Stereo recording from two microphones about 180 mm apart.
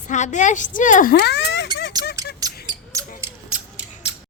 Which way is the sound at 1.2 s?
70° left (ahead or behind).